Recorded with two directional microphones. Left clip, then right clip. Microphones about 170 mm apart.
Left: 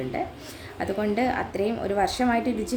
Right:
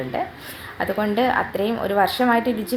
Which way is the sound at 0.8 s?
15° left (ahead or behind).